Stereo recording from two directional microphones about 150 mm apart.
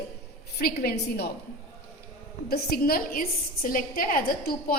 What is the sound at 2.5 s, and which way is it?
A woman's voice, 90° left.